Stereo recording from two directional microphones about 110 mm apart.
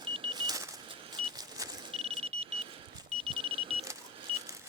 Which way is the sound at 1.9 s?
60° right (ahead or behind).